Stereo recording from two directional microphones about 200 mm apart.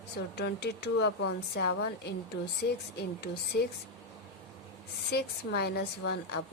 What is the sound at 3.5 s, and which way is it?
Speech, 55° left (ahead or behind).